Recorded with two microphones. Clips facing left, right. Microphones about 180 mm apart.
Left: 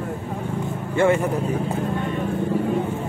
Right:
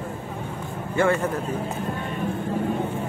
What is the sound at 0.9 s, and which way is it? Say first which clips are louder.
Speech: left 3 dB; 20° left (ahead or behind).